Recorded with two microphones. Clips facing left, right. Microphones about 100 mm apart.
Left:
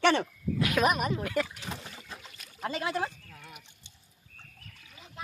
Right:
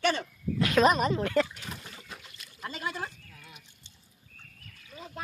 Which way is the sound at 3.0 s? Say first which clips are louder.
Left 6 dB; 25° left (ahead or behind).